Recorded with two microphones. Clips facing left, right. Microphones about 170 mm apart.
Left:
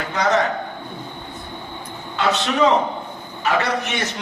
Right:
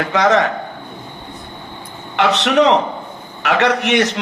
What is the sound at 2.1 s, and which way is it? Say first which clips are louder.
A man's voice: right 6 dB; 80° right.